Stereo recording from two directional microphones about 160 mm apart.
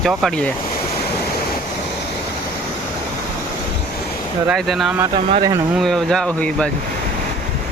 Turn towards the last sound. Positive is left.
turn(degrees=5)  # may be behind; listen again after turning